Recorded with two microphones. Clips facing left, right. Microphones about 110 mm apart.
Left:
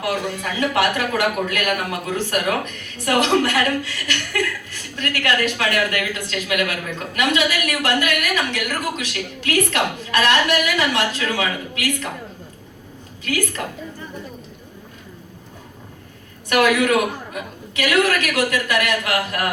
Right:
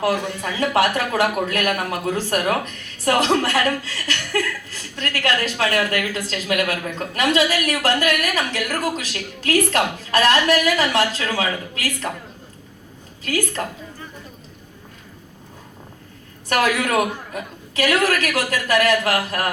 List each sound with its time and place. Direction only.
0.0 s speech: 35° right (ahead or behind)
16.5 s speech: 35° right (ahead or behind)